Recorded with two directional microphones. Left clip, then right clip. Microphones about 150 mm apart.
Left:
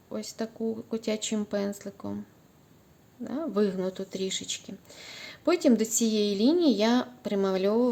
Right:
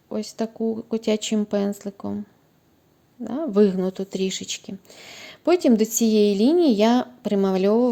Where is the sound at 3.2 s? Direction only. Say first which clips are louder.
Right 8 dB; 35° right (ahead or behind).